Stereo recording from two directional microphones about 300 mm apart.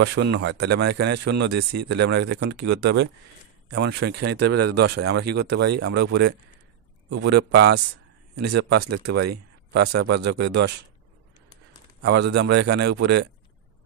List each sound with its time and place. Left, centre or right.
0.0 s speech: right
1.7 s speech: right
2.0 s speech: right
4.4 s speech: right
4.9 s speech: right
12.0 s speech: right